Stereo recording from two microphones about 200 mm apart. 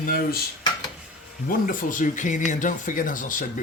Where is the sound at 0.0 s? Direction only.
45° left (ahead or behind).